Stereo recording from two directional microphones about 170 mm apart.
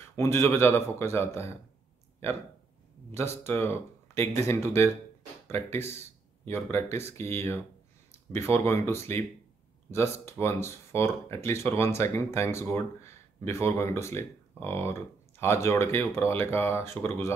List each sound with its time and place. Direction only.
0.1 s speech: 15° left (ahead or behind)
3.2 s speech: 15° left (ahead or behind)